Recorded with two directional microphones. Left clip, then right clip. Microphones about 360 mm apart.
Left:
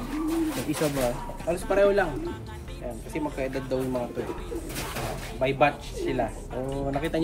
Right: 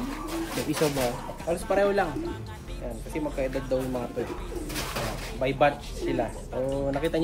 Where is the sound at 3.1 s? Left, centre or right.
Centre.